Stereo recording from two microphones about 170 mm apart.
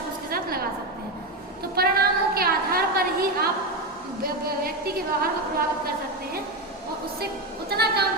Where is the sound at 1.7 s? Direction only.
65° right (ahead or behind).